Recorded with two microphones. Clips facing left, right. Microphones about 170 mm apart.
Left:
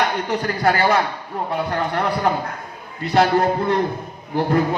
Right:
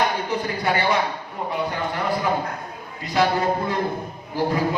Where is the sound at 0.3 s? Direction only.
65° left (ahead or behind).